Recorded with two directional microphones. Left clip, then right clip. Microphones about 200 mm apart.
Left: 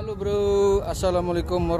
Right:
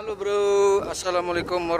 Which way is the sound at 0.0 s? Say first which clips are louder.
Right 1 dB; 15° left (ahead or behind).